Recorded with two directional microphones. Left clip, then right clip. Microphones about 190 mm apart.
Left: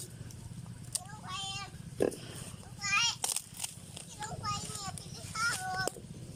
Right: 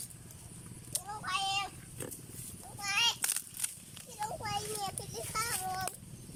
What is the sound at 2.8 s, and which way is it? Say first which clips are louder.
Children playing: even; 40° right (ahead or behind).